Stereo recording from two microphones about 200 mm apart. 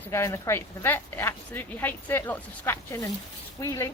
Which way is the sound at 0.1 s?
15° left (ahead or behind).